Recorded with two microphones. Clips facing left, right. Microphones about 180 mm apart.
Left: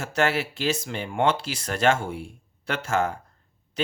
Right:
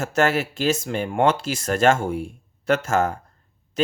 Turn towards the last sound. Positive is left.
turn(degrees=-45)  # may be behind; listen again after turning